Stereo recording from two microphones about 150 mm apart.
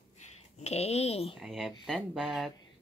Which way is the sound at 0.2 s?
45° left (ahead or behind).